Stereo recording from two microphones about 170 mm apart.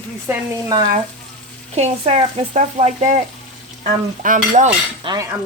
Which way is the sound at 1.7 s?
40° right (ahead or behind).